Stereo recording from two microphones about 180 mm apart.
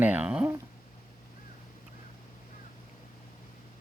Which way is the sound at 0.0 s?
10° right (ahead or behind).